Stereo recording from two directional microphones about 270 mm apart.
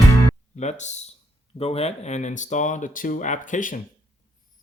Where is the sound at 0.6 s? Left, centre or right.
Left.